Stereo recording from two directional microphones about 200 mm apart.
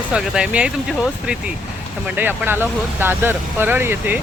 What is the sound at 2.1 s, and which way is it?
Speech, 10° right (ahead or behind).